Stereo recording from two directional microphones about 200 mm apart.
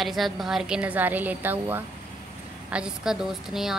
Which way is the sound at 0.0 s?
Centre (ahead or behind).